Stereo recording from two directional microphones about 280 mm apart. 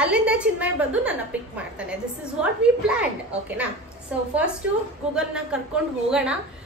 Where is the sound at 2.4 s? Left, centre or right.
Centre.